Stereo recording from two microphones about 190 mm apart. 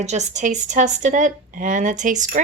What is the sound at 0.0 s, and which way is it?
A woman's voice, 35° right (ahead or behind).